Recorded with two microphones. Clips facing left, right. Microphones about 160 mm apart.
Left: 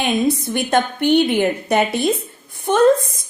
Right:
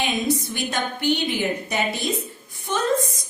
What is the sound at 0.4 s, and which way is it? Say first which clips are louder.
A woman's voice: left 8 dB; 55° left (ahead or behind).